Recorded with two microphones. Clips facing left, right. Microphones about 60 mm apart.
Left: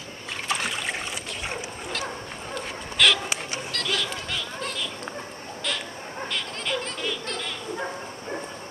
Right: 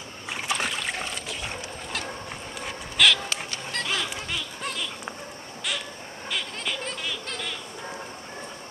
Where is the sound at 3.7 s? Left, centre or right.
Right.